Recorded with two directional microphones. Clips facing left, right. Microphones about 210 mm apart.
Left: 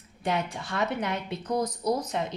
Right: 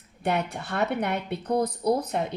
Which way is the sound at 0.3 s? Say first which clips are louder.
Right 2 dB; 60° right (ahead or behind).